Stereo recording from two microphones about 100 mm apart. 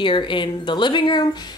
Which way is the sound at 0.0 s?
55° left (ahead or behind).